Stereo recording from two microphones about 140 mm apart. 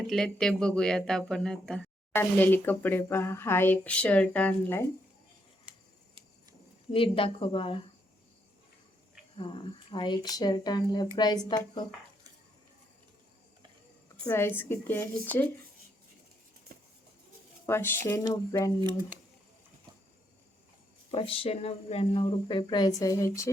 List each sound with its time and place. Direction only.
0.1 s speech: 5° left (ahead or behind)
5.7 s a sound: 10° right (ahead or behind)
6.9 s speech: 40° left (ahead or behind)
9.4 s speech: 35° left (ahead or behind)
14.3 s speech: 15° left (ahead or behind)
16.7 s a sound: 90° right
17.7 s speech: 15° left (ahead or behind)
21.1 s speech: 40° left (ahead or behind); by 23.5 s 20° left (ahead or behind)